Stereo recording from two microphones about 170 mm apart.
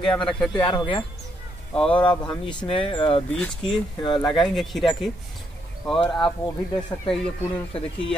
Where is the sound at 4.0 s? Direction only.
25° left (ahead or behind).